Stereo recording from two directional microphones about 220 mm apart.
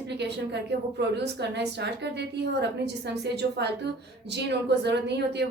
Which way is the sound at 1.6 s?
50° right (ahead or behind).